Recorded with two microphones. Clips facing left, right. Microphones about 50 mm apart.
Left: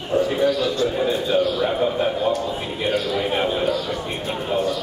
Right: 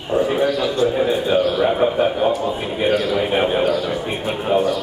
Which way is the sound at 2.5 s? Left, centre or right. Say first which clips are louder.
Right 4 dB; centre.